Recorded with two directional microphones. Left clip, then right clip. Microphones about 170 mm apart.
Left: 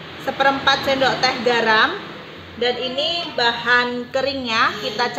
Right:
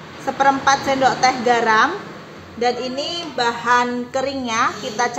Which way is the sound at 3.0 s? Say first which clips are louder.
Left 2 dB; 55° right (ahead or behind).